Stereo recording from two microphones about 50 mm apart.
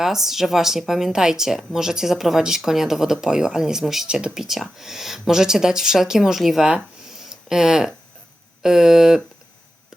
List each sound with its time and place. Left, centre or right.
0.0 s speech: centre
4.1 s speech: centre
4.4 s speech: centre
7.1 s a sound: centre
8.6 s speech: centre